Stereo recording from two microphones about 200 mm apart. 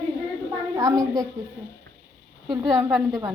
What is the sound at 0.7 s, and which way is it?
Speech, 15° right (ahead or behind).